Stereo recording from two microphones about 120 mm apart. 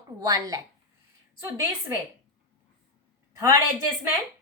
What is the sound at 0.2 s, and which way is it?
Speech, 30° right (ahead or behind).